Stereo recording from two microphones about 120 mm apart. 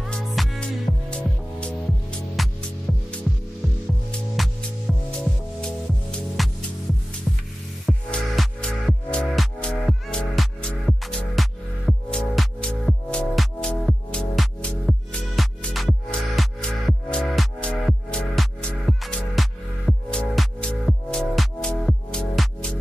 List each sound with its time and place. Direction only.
0.0 s music: 5° left (ahead or behind)
4.4 s music: centre (ahead or behind)
5.6 s music: 5° left (ahead or behind)